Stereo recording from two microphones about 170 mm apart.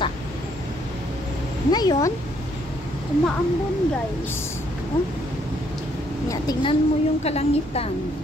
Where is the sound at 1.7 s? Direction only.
25° left (ahead or behind).